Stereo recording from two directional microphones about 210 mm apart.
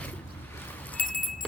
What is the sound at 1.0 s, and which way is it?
Keys jangling, 40° left (ahead or behind).